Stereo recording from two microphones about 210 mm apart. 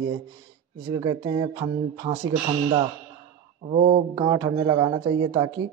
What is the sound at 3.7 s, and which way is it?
Speech, 30° right (ahead or behind).